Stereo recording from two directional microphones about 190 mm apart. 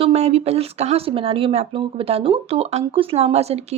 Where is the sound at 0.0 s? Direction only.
35° right (ahead or behind).